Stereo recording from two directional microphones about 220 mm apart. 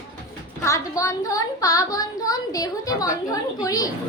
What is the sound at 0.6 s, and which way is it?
A woman's voice, 15° left (ahead or behind).